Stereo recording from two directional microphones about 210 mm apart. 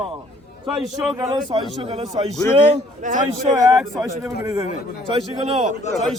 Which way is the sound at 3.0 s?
35° right (ahead or behind).